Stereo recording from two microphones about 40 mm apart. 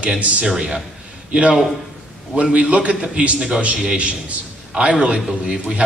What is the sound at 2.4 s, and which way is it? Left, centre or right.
A man's voice, right.